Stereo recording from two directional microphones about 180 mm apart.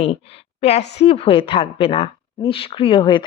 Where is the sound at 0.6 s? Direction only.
35° left (ahead or behind).